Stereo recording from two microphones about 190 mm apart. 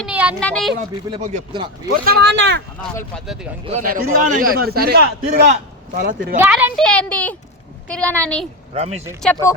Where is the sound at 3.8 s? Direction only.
45° right (ahead or behind).